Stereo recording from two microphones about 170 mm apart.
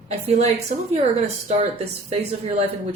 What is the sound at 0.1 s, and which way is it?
Speech, 40° right (ahead or behind).